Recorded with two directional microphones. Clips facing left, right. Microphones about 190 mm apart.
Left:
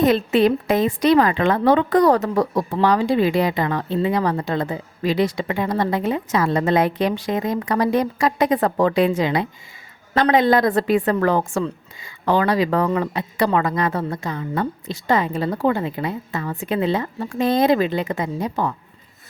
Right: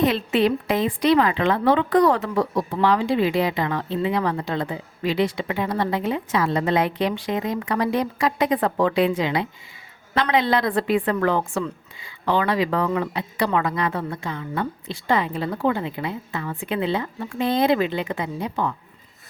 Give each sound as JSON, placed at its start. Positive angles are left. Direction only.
{"t": 0.0, "sound": "speech", "side_deg": 45}